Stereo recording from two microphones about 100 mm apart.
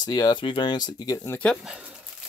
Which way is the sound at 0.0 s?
45° left (ahead or behind).